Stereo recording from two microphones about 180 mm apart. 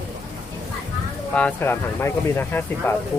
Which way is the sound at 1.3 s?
10° left (ahead or behind).